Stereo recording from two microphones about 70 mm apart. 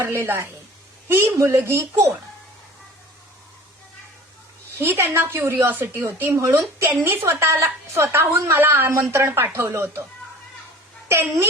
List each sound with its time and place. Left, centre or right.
0.0 s a woman's voice: right
4.8 s a woman's voice: right
6.3 s a woman's voice: right
11.1 s a woman's voice: right